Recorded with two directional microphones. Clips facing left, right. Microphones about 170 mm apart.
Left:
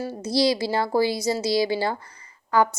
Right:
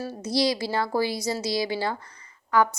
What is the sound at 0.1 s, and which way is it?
A woman's voice, 30° left (ahead or behind).